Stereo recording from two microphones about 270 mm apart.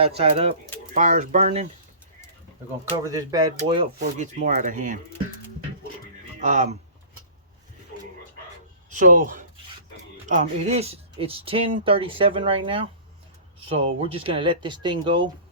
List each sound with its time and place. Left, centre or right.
0.0 s speech: right
3.0 s speech: centre; by 4.9 s right
6.4 s speech: right
9.0 s speech: right